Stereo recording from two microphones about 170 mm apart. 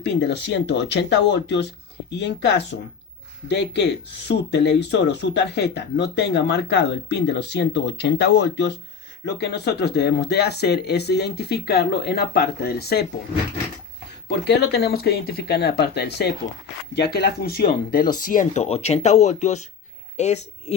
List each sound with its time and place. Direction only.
0.0 s speech: 85° left
14.3 s speech: 75° left (ahead or behind)
18.2 s speech: 55° left (ahead or behind)